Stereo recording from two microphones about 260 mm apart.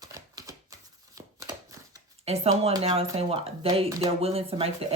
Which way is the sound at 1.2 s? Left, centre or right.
Centre.